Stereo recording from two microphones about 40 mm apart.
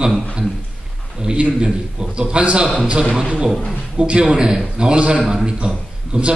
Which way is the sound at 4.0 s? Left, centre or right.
Right.